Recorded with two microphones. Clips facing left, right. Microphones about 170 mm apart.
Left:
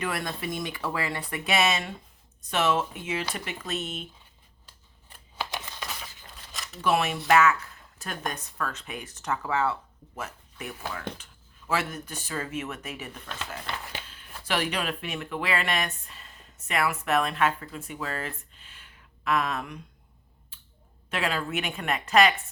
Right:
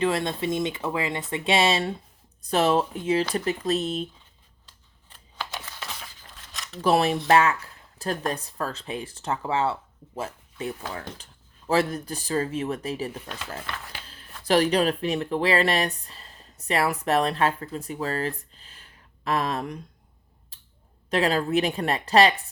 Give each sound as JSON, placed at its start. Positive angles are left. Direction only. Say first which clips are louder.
{"t": 0.0, "sound": "speech", "louder": "right 7 dB", "side_deg": -25}
{"t": 4.6, "sound": "scissors", "louder": "left 1 dB", "side_deg": 10}
{"t": 6.3, "sound": "a sound", "louder": "even", "side_deg": 0}
{"t": 6.8, "sound": "speech", "louder": "right 4 dB", "side_deg": -35}
{"t": 14.4, "sound": "speech", "louder": "right 8 dB", "side_deg": -40}
{"t": 20.5, "sound": "a sound", "louder": "left 4 dB", "side_deg": -35}
{"t": 21.1, "sound": "speech", "louder": "right 7 dB", "side_deg": -35}